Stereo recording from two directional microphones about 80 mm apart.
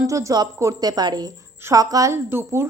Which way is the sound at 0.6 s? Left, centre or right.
Right.